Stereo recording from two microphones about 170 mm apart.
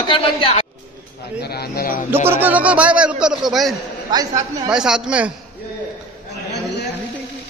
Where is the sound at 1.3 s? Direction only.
70° left (ahead or behind).